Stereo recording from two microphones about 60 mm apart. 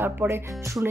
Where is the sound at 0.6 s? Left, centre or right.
Right.